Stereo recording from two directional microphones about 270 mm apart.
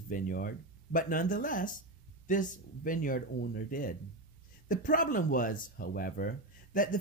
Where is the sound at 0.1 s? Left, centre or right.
Left.